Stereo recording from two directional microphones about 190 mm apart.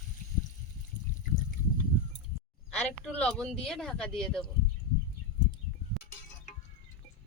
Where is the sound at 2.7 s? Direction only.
5° left (ahead or behind).